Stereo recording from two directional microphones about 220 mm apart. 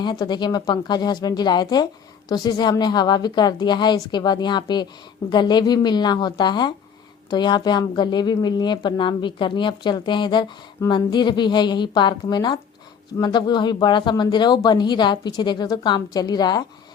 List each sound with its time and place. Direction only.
0.0 s a woman's voice: 20° left (ahead or behind)